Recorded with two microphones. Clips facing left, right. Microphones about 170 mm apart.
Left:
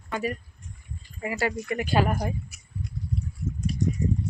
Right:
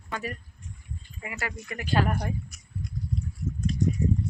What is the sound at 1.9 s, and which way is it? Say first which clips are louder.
Speech: even; 10° left (ahead or behind).